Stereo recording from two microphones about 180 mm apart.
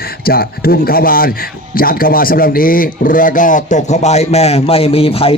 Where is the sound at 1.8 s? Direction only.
55° left (ahead or behind).